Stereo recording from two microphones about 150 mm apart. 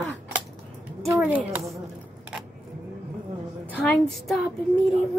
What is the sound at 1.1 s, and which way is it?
Speech, 10° right (ahead or behind).